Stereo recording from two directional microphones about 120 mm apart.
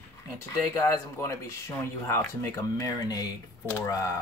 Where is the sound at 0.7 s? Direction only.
25° left (ahead or behind).